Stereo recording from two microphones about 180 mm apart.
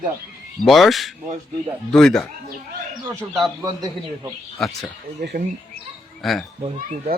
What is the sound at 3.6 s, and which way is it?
Speech, 15° right (ahead or behind).